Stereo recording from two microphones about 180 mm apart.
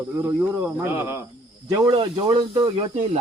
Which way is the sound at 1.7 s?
25° right (ahead or behind).